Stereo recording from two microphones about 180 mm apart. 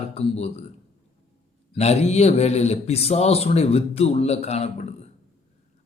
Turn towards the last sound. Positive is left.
turn(degrees=35)  # may be behind; listen again after turning